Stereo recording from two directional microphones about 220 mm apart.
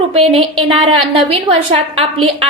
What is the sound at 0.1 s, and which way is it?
A woman's voice, 25° right (ahead or behind).